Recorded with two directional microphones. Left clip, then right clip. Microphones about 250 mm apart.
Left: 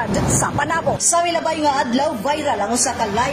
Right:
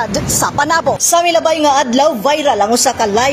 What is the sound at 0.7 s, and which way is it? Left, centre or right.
A woman's voice, right.